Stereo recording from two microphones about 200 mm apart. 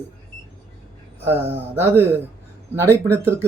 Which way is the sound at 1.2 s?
10° right (ahead or behind).